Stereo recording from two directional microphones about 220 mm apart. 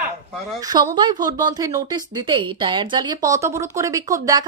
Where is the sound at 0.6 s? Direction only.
15° right (ahead or behind).